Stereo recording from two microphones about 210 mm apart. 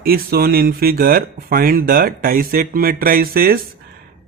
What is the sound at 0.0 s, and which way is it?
Speech, 45° right (ahead or behind).